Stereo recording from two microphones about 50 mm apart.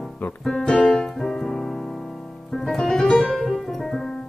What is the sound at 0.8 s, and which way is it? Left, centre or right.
Music, centre.